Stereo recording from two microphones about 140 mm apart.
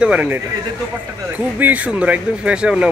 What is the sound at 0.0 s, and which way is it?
Speech, 10° right (ahead or behind).